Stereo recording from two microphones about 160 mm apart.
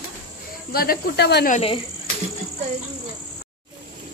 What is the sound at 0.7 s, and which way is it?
Speech, 70° left (ahead or behind).